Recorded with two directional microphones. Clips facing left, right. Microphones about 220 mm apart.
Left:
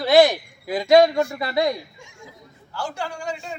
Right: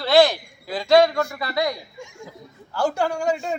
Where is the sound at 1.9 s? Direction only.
45° right (ahead or behind).